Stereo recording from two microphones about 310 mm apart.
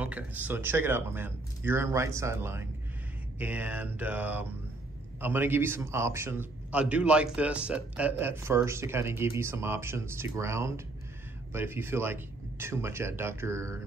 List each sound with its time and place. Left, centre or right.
0.0 s a man's voice: centre
3.3 s mantra: centre
5.2 s a man's voice: centre